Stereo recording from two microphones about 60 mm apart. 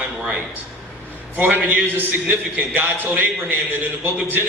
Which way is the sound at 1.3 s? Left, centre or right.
Right.